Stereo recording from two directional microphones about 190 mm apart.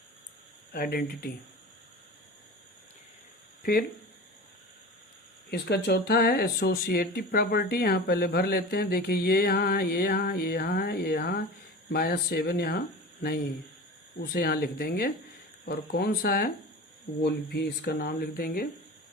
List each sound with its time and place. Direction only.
0.7 s speech: 50° left (ahead or behind)
3.6 s speech: 50° left (ahead or behind)
5.5 s speech: 60° left (ahead or behind)
14.2 s speech: 55° left (ahead or behind)